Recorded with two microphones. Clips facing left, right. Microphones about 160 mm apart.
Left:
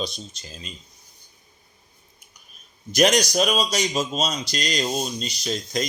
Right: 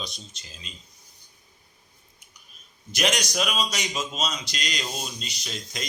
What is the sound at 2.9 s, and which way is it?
Speech, 40° left (ahead or behind).